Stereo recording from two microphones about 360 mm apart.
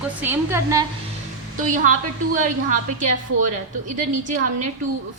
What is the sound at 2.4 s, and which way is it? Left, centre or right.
A woman's voice, right.